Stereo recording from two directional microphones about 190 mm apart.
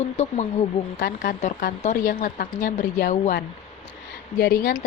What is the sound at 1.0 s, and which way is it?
Speech, 45° left (ahead or behind).